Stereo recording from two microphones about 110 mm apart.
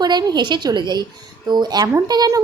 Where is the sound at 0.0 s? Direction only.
40° right (ahead or behind).